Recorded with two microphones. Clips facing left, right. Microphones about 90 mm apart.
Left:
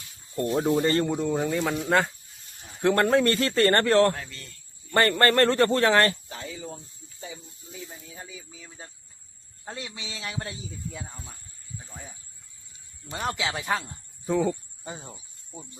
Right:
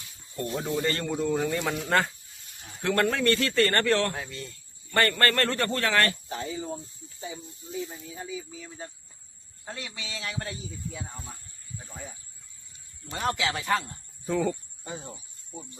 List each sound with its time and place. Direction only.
0.3 s a man's voice: 35° left (ahead or behind)
1.2 s a man's voice: 10° left (ahead or behind)
2.8 s a man's voice: 30° left (ahead or behind)
4.1 s speech: 10° right (ahead or behind)
4.9 s speech: 25° left (ahead or behind)
6.2 s speech: 25° right (ahead or behind)
8.1 s a man's voice: centre (ahead or behind)
9.6 s speech: 20° left (ahead or behind)
13.1 s a man's voice: 5° left (ahead or behind)